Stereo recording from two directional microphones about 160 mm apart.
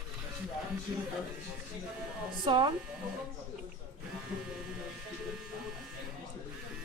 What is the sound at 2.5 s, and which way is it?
Speech, 30° right (ahead or behind).